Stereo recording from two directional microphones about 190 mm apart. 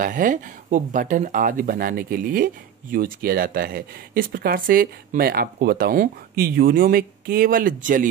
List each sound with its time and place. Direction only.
0.0 s speech: 45° right (ahead or behind)